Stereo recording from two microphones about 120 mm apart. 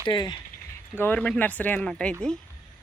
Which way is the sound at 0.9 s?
15° left (ahead or behind).